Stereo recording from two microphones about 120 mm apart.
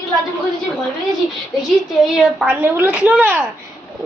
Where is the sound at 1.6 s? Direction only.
Centre (ahead or behind).